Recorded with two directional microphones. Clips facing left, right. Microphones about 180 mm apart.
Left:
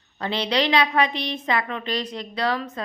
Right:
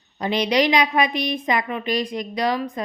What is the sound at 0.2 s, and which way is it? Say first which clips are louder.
Speech: right 4 dB; 15° right (ahead or behind).